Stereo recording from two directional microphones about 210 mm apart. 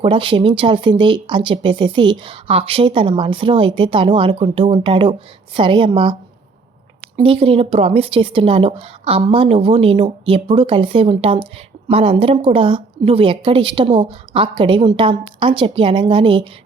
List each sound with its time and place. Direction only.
0.0 s speech: 25° right (ahead or behind)
7.2 s speech: 25° right (ahead or behind)